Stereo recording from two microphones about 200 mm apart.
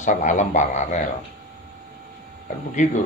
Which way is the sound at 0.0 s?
40° left (ahead or behind).